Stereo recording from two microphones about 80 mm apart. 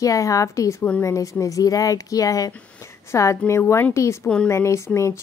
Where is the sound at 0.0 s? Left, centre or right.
Left.